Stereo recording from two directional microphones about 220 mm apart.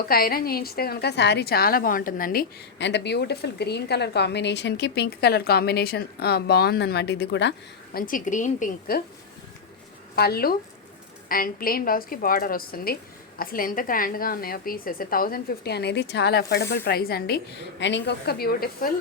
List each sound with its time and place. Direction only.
0.0 s a woman's voice: 40° left (ahead or behind)
7.9 s a woman's voice: 40° left (ahead or behind)
10.2 s a woman's voice: 45° left (ahead or behind)